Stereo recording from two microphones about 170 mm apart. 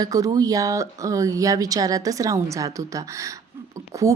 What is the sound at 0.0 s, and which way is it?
A woman's voice, 20° right (ahead or behind).